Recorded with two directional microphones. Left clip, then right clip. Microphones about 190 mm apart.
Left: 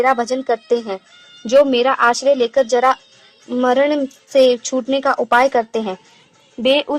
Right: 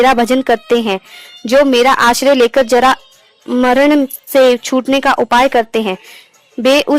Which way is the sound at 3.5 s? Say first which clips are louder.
Right 5 dB; 50° right (ahead or behind).